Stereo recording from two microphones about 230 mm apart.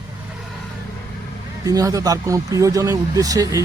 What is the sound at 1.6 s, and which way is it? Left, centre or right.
Speech, centre.